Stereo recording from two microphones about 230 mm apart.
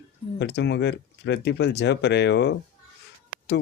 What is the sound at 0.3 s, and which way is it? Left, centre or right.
Speech, left.